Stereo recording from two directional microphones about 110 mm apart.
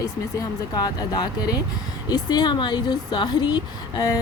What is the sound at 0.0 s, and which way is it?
Speech, 35° left (ahead or behind).